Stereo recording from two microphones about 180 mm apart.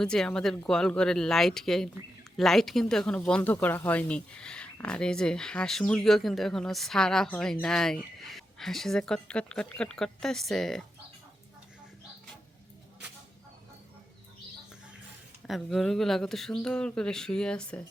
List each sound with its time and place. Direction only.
0.0 s speech: 5° left (ahead or behind)
15.4 s speech: centre (ahead or behind)